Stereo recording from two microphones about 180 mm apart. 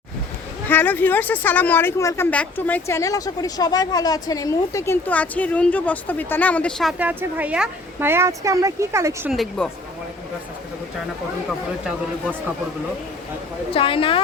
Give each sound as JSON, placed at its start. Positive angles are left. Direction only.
{"t": 0.7, "sound": "speech", "side_deg": 10}
{"t": 7.0, "sound": "speech", "side_deg": -10}
{"t": 9.3, "sound": "speech", "side_deg": 0}
{"t": 13.7, "sound": "a woman's voice", "side_deg": 30}